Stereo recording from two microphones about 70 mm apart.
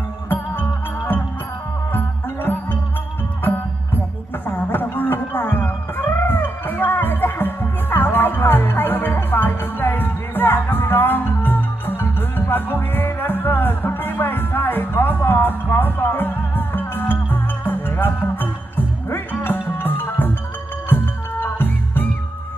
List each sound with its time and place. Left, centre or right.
0.3 s music: left
4.5 s music: left